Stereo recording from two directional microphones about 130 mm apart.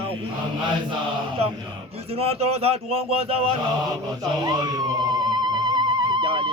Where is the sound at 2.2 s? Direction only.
50° right (ahead or behind).